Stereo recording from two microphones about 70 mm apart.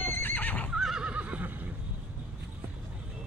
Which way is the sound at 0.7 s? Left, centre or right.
Centre.